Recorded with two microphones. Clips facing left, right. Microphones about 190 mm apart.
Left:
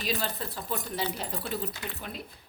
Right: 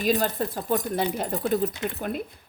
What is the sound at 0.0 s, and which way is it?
Speech, 50° right (ahead or behind).